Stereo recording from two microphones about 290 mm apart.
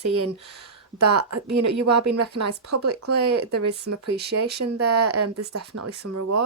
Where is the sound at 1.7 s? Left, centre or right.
Right.